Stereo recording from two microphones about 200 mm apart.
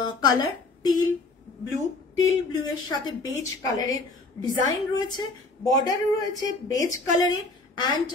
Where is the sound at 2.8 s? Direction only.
20° left (ahead or behind).